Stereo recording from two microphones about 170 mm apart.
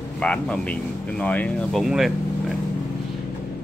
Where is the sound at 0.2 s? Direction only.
5° left (ahead or behind).